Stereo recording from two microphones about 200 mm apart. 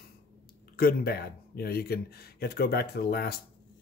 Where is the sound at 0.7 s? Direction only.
50° left (ahead or behind).